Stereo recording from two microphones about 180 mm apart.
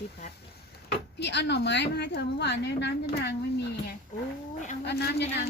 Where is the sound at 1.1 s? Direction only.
70° left (ahead or behind).